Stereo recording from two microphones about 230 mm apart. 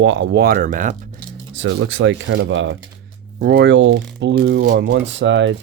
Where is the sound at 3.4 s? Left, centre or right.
Right.